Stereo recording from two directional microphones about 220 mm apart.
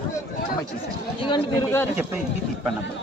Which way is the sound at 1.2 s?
20° left (ahead or behind).